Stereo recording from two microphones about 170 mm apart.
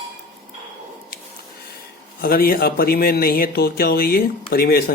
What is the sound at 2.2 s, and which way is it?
Speech, 60° left (ahead or behind).